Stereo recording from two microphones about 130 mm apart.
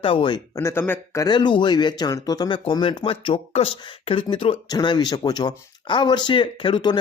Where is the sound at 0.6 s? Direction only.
20° left (ahead or behind).